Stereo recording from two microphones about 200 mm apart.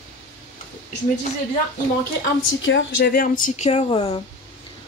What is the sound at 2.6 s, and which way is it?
Speech, 65° left (ahead or behind).